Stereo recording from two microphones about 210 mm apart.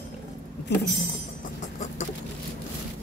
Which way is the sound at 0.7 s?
55° left (ahead or behind).